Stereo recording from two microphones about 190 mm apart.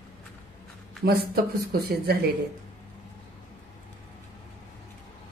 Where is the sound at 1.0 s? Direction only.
55° right (ahead or behind).